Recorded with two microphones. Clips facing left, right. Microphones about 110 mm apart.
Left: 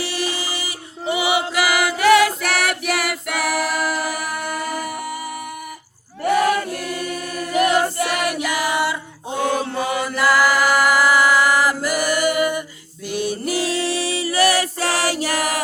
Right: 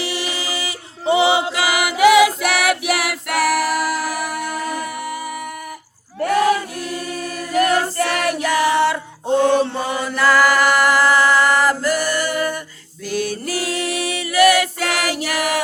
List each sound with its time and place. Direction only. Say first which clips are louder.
0.0 s music: even; 20° right (ahead or behind)
1.0 s choir: right 5 dB; 25° right (ahead or behind); by 4.1 s centre (ahead or behind)
4.3 s music: right 1 dB; 5° left (ahead or behind)
7.5 s choir: even; 15° left (ahead or behind)
9.7 s chant: even; 10° left (ahead or behind)
13.1 s music: even; 20° left (ahead or behind); by 15.6 s 40° left (ahead or behind)